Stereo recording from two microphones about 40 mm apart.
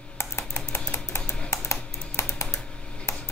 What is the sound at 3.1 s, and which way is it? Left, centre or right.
Tick-tock, left.